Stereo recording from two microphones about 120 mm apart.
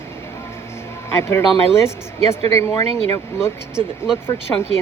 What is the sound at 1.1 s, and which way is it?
A woman's voice, 20° left (ahead or behind).